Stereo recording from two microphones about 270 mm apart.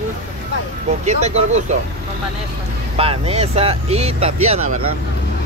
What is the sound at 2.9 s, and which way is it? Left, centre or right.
Speech, right.